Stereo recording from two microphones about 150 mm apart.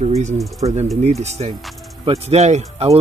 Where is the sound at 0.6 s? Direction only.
40° right (ahead or behind).